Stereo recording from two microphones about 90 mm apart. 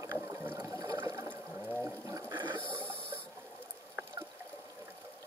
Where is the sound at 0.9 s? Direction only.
35° right (ahead or behind).